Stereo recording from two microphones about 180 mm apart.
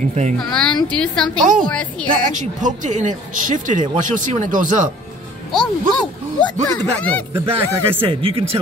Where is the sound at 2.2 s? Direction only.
45° right (ahead or behind).